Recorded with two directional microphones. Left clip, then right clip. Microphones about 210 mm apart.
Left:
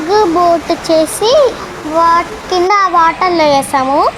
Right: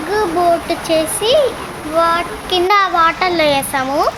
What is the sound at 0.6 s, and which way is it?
A child's voice, 10° left (ahead or behind).